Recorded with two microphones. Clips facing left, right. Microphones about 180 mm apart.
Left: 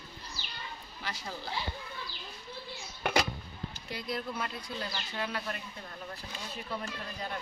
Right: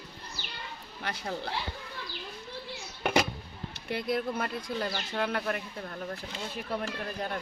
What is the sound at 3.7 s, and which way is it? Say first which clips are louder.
Speech: right 8 dB; 60° right (ahead or behind).